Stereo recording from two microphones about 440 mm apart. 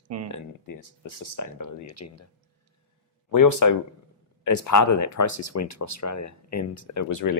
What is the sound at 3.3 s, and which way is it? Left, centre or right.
Speech, left.